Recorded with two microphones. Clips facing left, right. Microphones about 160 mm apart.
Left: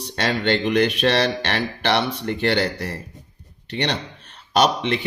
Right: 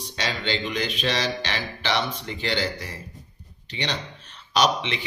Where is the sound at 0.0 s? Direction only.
60° left (ahead or behind).